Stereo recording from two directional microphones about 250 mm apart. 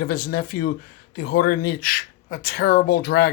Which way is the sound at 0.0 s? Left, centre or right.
Left.